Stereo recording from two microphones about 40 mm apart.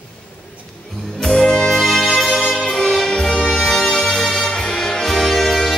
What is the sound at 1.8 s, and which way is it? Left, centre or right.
Music, centre.